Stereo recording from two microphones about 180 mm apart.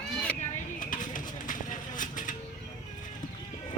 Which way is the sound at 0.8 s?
45° left (ahead or behind).